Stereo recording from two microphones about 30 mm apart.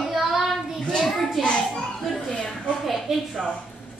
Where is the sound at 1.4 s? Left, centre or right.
Centre.